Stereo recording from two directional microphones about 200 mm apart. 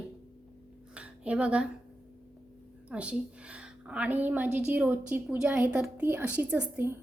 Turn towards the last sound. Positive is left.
turn(degrees=-10)  # may be behind; listen again after turning